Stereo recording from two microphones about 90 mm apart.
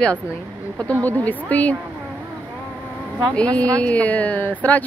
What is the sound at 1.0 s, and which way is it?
Speech, 15° left (ahead or behind).